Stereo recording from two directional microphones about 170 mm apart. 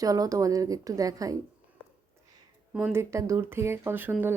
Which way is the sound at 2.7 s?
10° right (ahead or behind).